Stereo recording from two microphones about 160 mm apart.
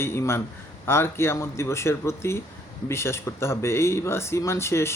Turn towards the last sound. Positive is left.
turn(degrees=15)  # may be behind; listen again after turning